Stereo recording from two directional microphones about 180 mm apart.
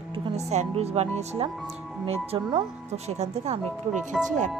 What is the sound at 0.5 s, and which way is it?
Speech, 35° right (ahead or behind).